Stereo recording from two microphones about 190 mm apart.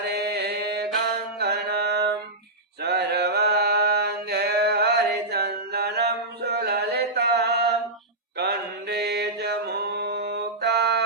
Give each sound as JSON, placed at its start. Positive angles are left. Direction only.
{"t": 0.0, "sound": "mantra", "side_deg": -55}
{"t": 1.4, "sound": "music", "side_deg": -55}
{"t": 2.8, "sound": "mantra", "side_deg": -60}